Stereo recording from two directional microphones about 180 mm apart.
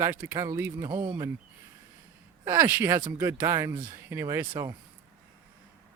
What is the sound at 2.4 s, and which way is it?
Speech, 15° right (ahead or behind).